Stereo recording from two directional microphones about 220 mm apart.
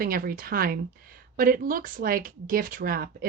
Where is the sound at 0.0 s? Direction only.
40° right (ahead or behind).